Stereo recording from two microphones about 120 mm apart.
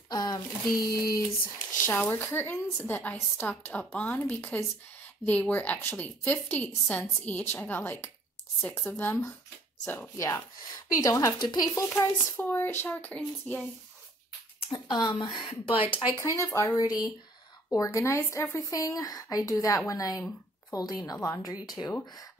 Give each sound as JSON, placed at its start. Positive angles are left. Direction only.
{"t": 0.1, "sound": "a sound", "side_deg": 35}
{"t": 0.7, "sound": "speech", "side_deg": 35}
{"t": 1.8, "sound": "speech", "side_deg": 20}
{"t": 10.1, "sound": "speech", "side_deg": 30}
{"t": 14.7, "sound": "speech", "side_deg": 35}
{"t": 16.1, "sound": "speech", "side_deg": 30}